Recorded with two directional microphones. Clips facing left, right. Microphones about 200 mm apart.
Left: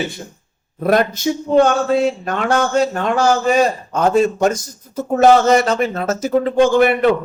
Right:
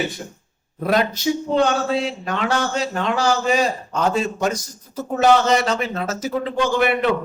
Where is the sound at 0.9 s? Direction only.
50° left (ahead or behind).